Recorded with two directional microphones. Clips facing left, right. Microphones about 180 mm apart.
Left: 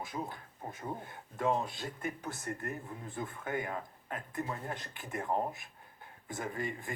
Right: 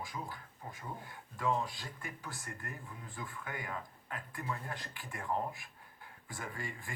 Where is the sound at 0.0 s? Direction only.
20° left (ahead or behind).